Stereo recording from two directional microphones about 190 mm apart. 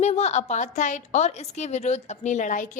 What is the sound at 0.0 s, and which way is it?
A woman's voice, 35° left (ahead or behind).